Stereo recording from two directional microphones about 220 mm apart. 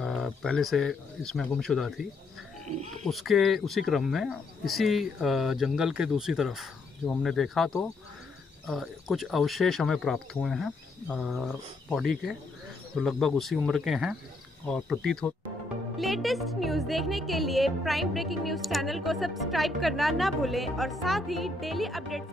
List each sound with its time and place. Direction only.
0.0 s speech: centre (ahead or behind)
2.6 s pig: 30° right (ahead or behind)
3.1 s speech: centre (ahead or behind)